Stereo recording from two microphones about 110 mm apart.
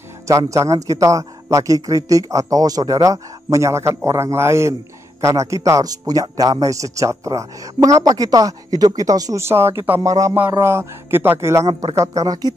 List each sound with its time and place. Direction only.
0.3 s a man's voice: 30° right (ahead or behind)